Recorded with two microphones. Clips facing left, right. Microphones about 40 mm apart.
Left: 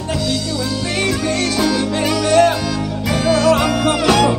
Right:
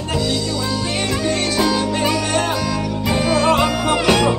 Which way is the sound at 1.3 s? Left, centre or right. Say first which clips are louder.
Left 1 dB; right.